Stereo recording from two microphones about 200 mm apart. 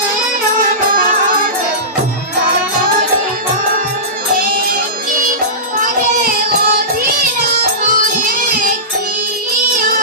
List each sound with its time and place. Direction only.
5.8 s child singing: 45° right (ahead or behind)